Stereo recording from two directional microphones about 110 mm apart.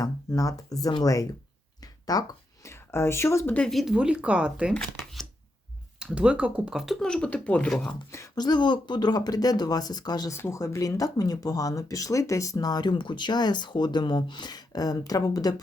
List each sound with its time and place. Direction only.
0.0 s speech: 30° left (ahead or behind)
1.8 s a sound: 35° left (ahead or behind)
2.6 s speech: 25° left (ahead or behind)
3.7 s speech: centre (ahead or behind)
4.7 s speech: 5° left (ahead or behind)
6.0 s speech: 10° right (ahead or behind); by 7.9 s 10° left (ahead or behind)
8.4 s speech: 40° left (ahead or behind)
10.3 s speech: 25° left (ahead or behind)